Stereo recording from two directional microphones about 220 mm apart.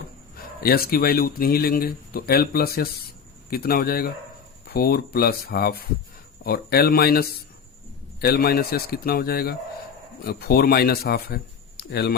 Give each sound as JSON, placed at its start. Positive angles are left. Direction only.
{"t": 0.6, "sound": "speech", "side_deg": 45}